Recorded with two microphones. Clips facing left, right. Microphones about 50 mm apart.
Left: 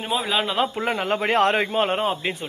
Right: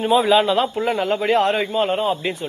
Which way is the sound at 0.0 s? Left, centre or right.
Centre.